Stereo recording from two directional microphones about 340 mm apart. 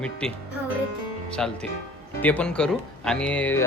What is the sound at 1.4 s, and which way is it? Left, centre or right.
A man's voice, centre.